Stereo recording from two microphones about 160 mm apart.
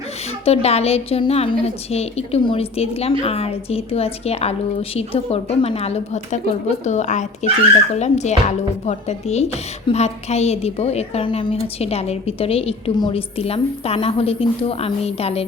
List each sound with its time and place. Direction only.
0.4 s a woman's voice: 40° left (ahead or behind)